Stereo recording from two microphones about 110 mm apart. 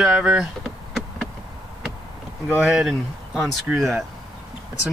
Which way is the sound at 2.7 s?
5° right (ahead or behind).